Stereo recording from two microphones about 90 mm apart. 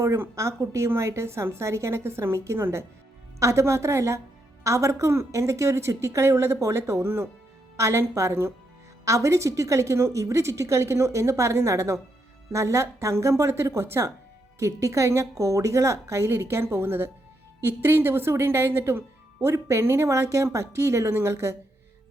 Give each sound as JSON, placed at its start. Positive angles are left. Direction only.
{"t": 0.0, "sound": "a woman's voice", "side_deg": -35}